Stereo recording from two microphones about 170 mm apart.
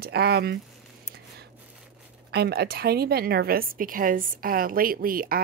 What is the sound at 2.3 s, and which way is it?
A woman's voice, 70° right (ahead or behind).